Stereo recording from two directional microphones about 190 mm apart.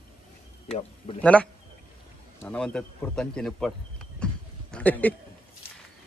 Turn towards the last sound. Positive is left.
turn(degrees=10)  # may be behind; listen again after turning